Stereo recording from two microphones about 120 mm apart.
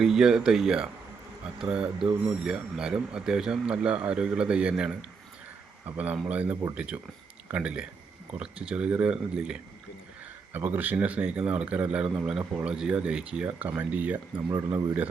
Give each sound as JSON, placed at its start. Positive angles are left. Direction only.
{"t": 0.0, "sound": "speech", "side_deg": -5}